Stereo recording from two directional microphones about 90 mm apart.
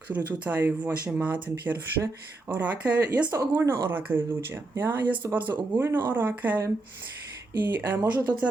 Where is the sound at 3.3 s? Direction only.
35° right (ahead or behind).